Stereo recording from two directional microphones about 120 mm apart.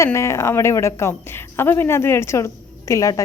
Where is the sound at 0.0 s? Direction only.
25° left (ahead or behind).